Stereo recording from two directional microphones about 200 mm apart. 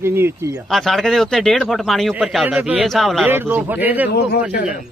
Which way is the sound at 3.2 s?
10° right (ahead or behind).